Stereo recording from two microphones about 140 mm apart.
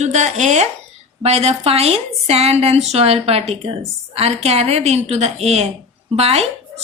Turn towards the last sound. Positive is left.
turn(degrees=-45)  # may be behind; listen again after turning